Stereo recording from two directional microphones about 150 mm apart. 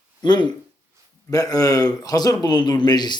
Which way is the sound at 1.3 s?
25° left (ahead or behind).